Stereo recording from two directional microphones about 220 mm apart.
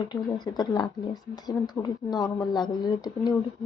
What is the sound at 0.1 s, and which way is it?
Speech, 20° left (ahead or behind).